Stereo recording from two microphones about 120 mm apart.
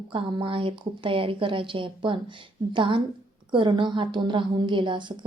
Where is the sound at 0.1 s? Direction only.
45° right (ahead or behind).